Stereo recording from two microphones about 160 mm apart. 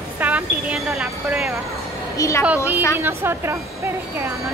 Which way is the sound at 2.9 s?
15° right (ahead or behind).